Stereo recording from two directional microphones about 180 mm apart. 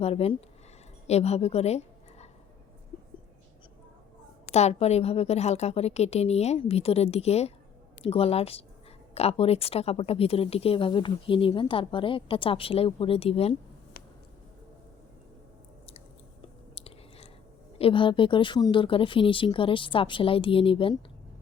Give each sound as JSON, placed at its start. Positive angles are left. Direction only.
{"t": 0.0, "sound": "a woman's voice", "side_deg": 35}
{"t": 4.4, "sound": "speech", "side_deg": 35}
{"t": 14.0, "sound": "a sound", "side_deg": 55}
{"t": 16.7, "sound": "chewing", "side_deg": 30}
{"t": 17.7, "sound": "speech", "side_deg": 30}